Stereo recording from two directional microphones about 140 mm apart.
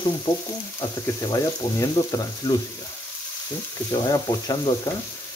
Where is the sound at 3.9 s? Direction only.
25° left (ahead or behind).